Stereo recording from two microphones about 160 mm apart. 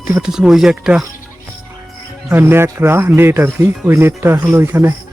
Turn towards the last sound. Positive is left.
turn(degrees=-15)  # may be behind; listen again after turning